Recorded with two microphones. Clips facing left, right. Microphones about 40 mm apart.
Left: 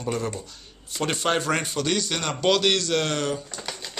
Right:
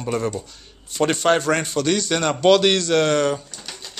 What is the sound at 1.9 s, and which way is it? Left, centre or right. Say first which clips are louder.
A man's voice: right 7 dB; centre.